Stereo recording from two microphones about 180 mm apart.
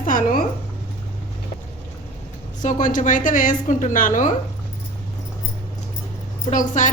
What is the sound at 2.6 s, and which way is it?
A woman's voice, 45° left (ahead or behind).